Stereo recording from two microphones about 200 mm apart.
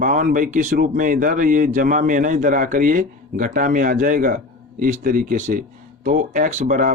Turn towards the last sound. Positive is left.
turn(degrees=-40)  # may be behind; listen again after turning